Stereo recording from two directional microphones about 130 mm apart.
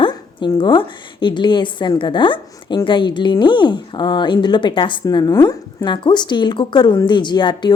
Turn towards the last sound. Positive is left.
turn(degrees=35)  # may be behind; listen again after turning